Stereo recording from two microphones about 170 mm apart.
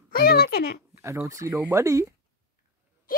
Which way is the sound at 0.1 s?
65° left (ahead or behind).